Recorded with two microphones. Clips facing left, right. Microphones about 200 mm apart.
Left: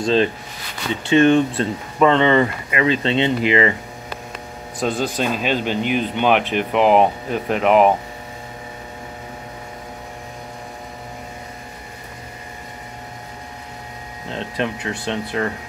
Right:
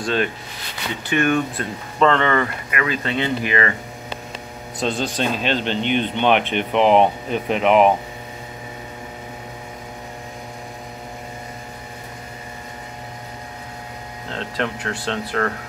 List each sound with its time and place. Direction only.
0.0 s speech: 30° left (ahead or behind)
4.7 s speech: 5° left (ahead or behind)
14.3 s speech: 15° left (ahead or behind)